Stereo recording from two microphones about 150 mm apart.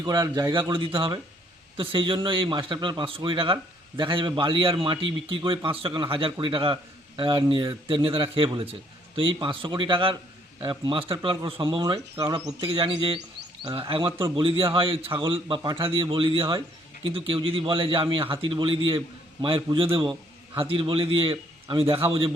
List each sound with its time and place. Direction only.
0.0 s a man's voice: 25° right (ahead or behind)
0.7 s a man's voice: 35° right (ahead or behind); by 12.5 s 20° right (ahead or behind)
12.6 s a man's voice: 35° right (ahead or behind)